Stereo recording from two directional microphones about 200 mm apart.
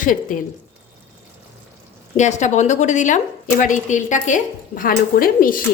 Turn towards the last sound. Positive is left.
turn(degrees=45)  # may be behind; listen again after turning